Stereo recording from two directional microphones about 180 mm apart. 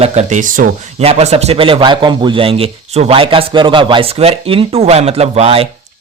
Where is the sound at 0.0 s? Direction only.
40° right (ahead or behind).